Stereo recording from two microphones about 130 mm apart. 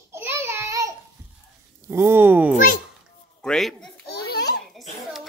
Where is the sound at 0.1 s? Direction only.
20° right (ahead or behind).